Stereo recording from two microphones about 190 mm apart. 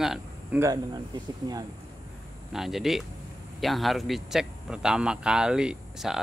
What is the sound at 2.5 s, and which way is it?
Speech, centre (ahead or behind).